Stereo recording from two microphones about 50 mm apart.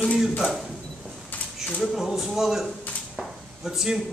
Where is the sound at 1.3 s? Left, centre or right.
Left.